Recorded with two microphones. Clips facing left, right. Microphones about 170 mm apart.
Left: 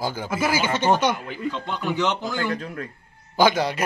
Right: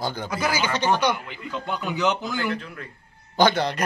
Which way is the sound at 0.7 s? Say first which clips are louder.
Left 3 dB; 25° left (ahead or behind).